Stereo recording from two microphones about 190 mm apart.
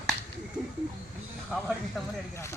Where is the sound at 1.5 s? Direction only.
Centre (ahead or behind).